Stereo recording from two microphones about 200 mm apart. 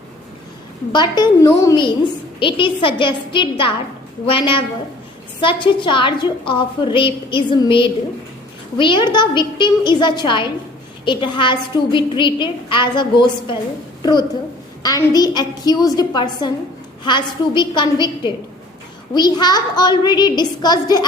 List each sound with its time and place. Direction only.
0.9 s a woman's voice: 20° left (ahead or behind)